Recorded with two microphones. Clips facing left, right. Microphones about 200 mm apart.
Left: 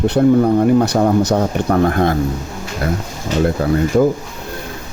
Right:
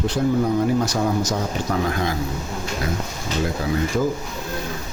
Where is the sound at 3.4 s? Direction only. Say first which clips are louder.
Left 7 dB; 55° left (ahead or behind).